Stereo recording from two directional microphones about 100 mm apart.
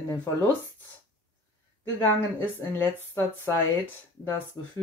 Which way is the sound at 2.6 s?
20° left (ahead or behind).